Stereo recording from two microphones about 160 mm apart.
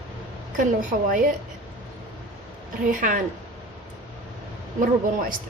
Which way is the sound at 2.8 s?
55° right (ahead or behind).